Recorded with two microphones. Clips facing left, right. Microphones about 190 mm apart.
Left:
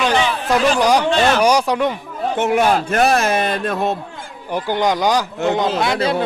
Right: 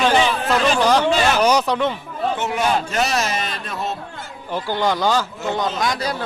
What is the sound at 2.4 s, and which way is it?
A man's voice, 55° left (ahead or behind).